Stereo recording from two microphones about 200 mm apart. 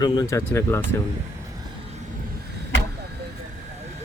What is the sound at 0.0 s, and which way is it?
Speech, 20° left (ahead or behind).